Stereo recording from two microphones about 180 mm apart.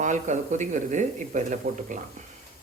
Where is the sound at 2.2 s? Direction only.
40° right (ahead or behind).